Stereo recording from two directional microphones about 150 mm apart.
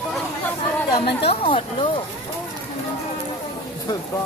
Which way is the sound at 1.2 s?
40° left (ahead or behind).